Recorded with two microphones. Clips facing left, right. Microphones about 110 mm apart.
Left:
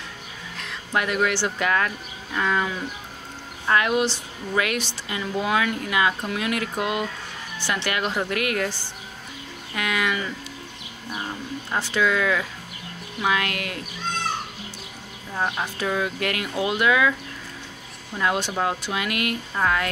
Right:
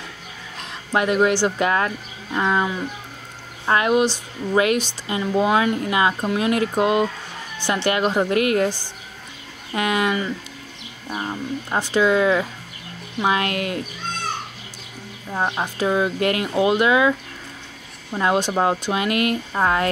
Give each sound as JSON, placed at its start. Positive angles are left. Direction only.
{"t": 0.7, "sound": "a sound", "side_deg": -25}
{"t": 1.6, "sound": "speech", "side_deg": -25}
{"t": 5.0, "sound": "speech", "side_deg": -30}
{"t": 9.8, "sound": "speech", "side_deg": -30}
{"t": 15.3, "sound": "speech", "side_deg": -25}
{"t": 18.1, "sound": "speech", "side_deg": -30}